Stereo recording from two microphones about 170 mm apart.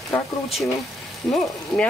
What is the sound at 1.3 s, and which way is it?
Speech, centre (ahead or behind).